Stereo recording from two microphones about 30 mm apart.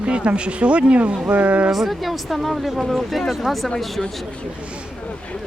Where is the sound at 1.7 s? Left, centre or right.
Centre.